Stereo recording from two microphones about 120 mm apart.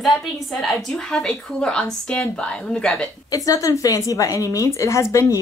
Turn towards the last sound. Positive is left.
turn(degrees=25)  # may be behind; listen again after turning